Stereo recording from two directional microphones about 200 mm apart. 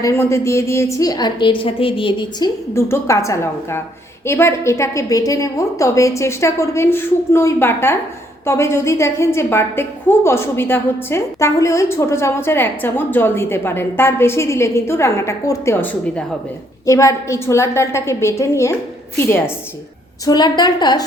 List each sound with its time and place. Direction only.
0.0 s a woman's voice: 15° left (ahead or behind)
2.7 s a woman's voice: 15° left (ahead or behind)